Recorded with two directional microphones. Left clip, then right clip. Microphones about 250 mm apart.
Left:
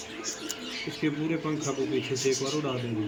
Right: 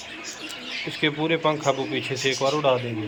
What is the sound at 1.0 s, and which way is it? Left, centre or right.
Speech, right.